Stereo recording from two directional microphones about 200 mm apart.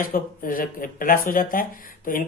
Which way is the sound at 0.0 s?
45° left (ahead or behind).